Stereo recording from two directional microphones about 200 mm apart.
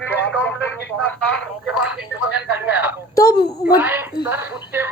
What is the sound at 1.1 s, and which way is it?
Speech, 5° left (ahead or behind).